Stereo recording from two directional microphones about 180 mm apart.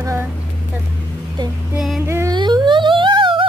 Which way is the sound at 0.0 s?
15° right (ahead or behind).